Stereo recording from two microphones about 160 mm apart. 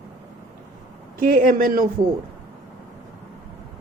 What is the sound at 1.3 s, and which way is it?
Speech, 60° right (ahead or behind).